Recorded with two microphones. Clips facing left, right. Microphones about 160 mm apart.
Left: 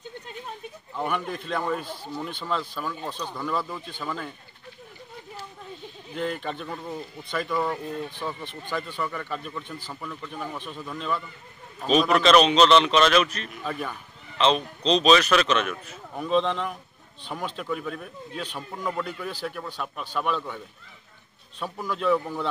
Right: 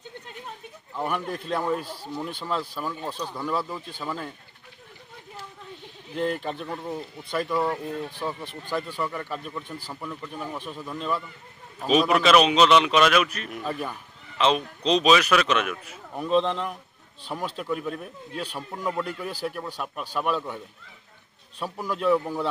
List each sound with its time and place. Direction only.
0.9 s a man's voice: 5° right (ahead or behind)
6.1 s speech: 40° right (ahead or behind)
6.4 s a man's voice: 5° right (ahead or behind)